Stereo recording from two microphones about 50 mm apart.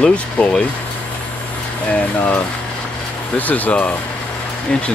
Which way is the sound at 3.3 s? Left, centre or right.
Left.